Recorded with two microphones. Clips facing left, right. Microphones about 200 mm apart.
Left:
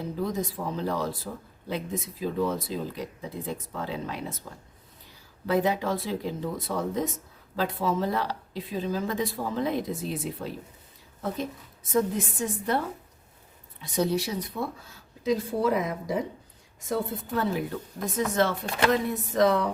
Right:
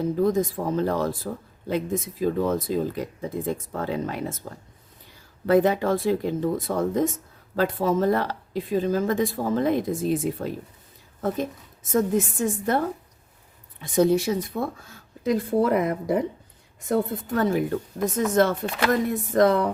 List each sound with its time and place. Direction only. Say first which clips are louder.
0.2 s speech: right 6 dB; 50° right (ahead or behind)